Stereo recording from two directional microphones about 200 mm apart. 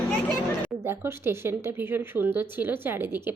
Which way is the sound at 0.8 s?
10° right (ahead or behind).